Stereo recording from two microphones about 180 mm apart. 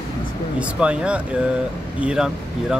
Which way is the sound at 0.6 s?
5° right (ahead or behind).